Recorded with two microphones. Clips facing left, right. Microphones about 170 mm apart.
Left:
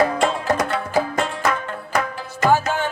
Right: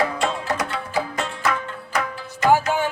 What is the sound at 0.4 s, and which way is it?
Music, 45° left (ahead or behind).